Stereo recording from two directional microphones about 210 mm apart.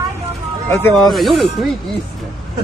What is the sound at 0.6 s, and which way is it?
Speech, 10° left (ahead or behind).